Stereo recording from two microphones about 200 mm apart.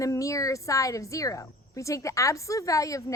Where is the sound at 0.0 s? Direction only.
15° left (ahead or behind).